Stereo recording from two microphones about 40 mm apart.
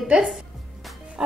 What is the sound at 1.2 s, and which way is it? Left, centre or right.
Music, right.